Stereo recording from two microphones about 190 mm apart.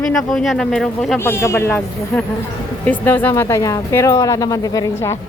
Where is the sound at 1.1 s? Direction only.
15° left (ahead or behind).